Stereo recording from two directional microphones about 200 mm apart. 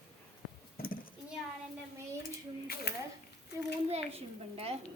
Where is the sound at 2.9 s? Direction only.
55° left (ahead or behind).